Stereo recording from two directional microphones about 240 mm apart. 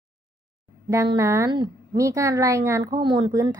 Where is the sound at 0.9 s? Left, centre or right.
Centre.